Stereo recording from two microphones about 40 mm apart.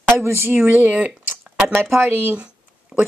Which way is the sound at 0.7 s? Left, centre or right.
Right.